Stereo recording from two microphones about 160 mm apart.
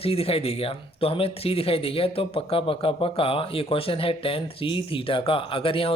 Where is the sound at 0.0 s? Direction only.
35° left (ahead or behind).